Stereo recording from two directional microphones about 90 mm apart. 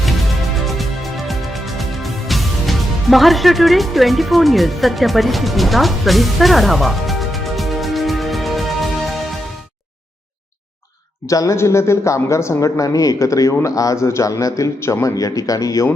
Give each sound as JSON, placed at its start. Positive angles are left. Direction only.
{"t": 0.6, "sound": "music", "side_deg": 0}
{"t": 11.3, "sound": "speech", "side_deg": 35}